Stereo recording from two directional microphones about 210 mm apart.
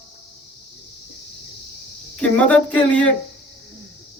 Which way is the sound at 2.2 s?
5° left (ahead or behind).